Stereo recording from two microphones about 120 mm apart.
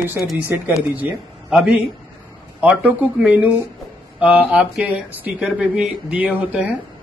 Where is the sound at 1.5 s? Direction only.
5° right (ahead or behind).